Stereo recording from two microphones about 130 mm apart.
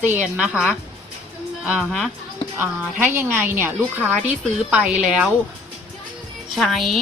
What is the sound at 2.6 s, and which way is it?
A woman's voice, 15° right (ahead or behind).